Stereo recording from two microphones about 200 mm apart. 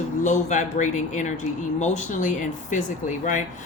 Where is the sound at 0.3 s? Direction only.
40° left (ahead or behind).